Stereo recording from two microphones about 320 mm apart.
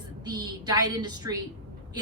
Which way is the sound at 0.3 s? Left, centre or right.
Centre.